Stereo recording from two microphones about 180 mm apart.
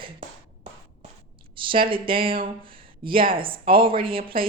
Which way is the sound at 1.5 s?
30° right (ahead or behind).